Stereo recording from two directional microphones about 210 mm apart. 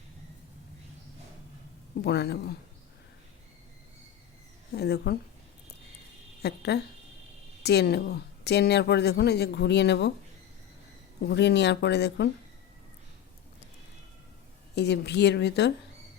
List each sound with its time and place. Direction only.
2.0 s a woman's voice: 50° left (ahead or behind)
4.7 s a woman's voice: 50° left (ahead or behind)
6.4 s a woman's voice: 50° left (ahead or behind)
11.2 s a woman's voice: 55° left (ahead or behind)
14.8 s a woman's voice: 55° left (ahead or behind)